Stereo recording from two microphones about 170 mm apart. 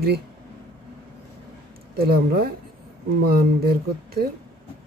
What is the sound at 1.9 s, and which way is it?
Speech, 65° right (ahead or behind).